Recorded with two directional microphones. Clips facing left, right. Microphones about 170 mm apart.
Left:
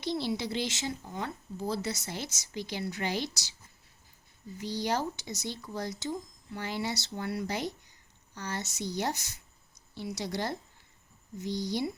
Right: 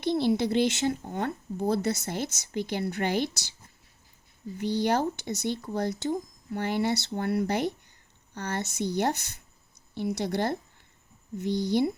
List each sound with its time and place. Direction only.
0.0 s speech: 55° right (ahead or behind)
4.5 s speech: 60° right (ahead or behind)